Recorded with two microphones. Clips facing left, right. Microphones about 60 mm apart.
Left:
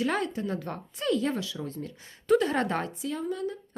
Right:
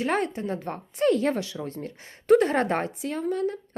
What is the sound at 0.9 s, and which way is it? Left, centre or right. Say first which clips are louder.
Speech: right 5 dB; right.